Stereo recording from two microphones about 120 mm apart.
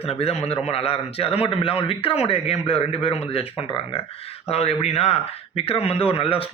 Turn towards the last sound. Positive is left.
turn(degrees=50)  # may be behind; listen again after turning